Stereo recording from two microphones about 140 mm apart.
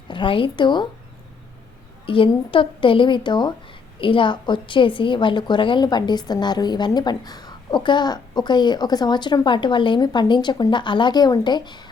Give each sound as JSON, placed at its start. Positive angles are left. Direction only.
{"t": 0.1, "sound": "a woman's voice", "side_deg": 35}
{"t": 2.0, "sound": "a woman's voice", "side_deg": 40}